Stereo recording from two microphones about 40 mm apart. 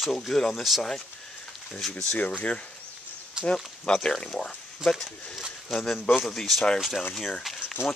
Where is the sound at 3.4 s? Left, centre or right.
Right.